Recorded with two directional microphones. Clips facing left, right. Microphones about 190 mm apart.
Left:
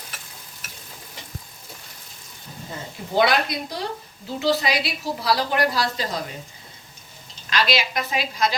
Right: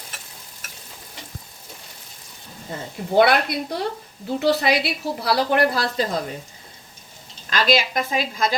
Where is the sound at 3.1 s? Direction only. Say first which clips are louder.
Right 3 dB; 60° right (ahead or behind).